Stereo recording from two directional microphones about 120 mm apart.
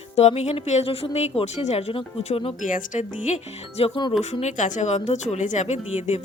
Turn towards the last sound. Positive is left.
turn(degrees=65)  # may be behind; listen again after turning